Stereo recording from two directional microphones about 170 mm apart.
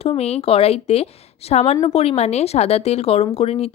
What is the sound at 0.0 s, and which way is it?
Speech, 35° left (ahead or behind).